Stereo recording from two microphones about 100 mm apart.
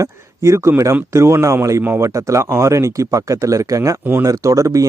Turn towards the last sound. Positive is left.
turn(degrees=-30)  # may be behind; listen again after turning